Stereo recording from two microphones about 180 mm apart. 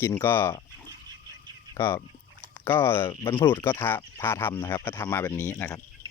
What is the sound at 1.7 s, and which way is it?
Speech, 15° left (ahead or behind).